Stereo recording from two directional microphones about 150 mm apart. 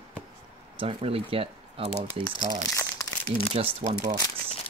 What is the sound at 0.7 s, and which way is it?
Speech, 40° right (ahead or behind).